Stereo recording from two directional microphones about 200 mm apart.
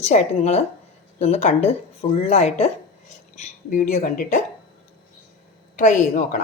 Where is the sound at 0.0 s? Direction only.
35° left (ahead or behind).